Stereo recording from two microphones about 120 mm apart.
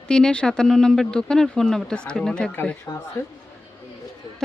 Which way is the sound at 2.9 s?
25° left (ahead or behind).